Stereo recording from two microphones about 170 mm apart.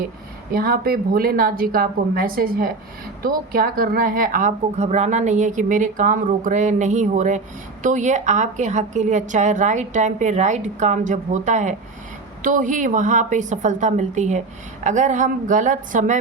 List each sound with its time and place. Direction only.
0.5 s a woman's voice: 60° right (ahead or behind)